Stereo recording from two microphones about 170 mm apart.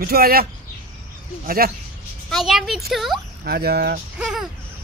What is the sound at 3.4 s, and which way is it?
Speech, 70° right (ahead or behind).